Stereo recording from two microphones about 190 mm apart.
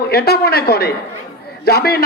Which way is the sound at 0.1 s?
55° left (ahead or behind).